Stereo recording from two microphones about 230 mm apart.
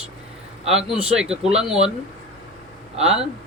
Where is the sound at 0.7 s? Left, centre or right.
Centre.